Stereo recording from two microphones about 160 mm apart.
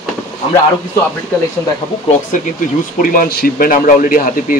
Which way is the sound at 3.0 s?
60° left (ahead or behind).